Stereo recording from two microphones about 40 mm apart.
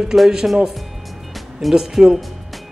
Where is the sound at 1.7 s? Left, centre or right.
Centre.